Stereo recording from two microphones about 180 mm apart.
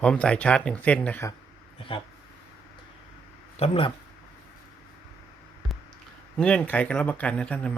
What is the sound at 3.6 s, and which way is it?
Speech, 30° left (ahead or behind).